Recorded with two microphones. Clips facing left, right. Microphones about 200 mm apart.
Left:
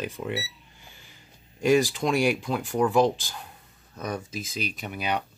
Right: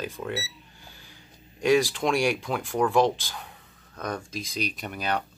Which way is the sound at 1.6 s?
Centre (ahead or behind).